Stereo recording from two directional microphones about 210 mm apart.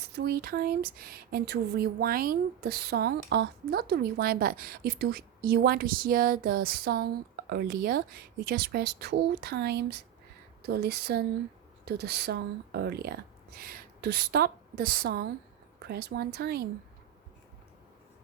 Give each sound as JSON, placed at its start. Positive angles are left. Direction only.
{"t": 0.2, "sound": "a woman's voice", "side_deg": -45}